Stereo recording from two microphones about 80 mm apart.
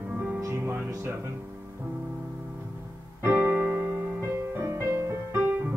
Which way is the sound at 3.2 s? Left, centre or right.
Right.